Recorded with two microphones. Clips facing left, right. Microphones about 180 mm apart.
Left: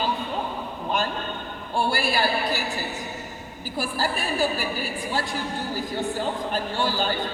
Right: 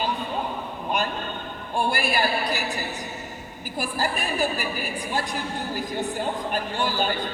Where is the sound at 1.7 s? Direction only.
15° right (ahead or behind).